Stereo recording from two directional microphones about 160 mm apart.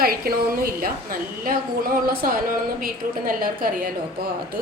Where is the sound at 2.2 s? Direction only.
65° right (ahead or behind).